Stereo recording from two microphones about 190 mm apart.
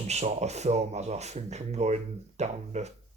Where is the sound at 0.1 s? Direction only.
35° right (ahead or behind).